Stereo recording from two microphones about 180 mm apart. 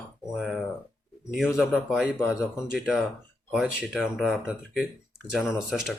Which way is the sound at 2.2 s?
15° left (ahead or behind).